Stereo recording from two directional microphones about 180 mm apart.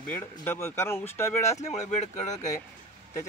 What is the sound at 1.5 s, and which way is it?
Speech, 40° left (ahead or behind).